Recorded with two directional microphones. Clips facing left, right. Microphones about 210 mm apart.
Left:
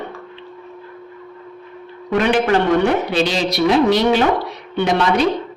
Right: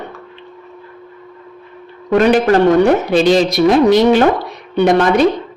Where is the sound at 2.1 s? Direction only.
40° right (ahead or behind).